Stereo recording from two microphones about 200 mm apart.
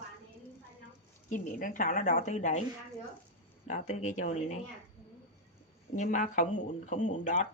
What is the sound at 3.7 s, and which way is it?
Speech, 35° left (ahead or behind).